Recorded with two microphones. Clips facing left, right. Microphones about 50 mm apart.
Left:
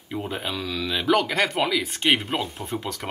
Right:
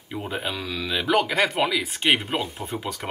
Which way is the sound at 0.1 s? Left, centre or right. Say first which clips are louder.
Even; centre.